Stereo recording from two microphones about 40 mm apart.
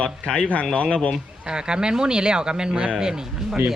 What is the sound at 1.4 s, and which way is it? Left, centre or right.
Speech, right.